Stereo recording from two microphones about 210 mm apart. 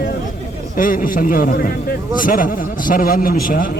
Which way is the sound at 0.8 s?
40° left (ahead or behind).